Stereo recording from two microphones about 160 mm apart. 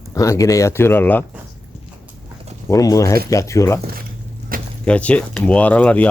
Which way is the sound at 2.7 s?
20° left (ahead or behind).